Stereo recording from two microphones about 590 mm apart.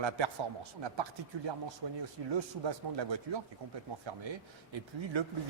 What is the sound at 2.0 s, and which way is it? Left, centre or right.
Speech, right.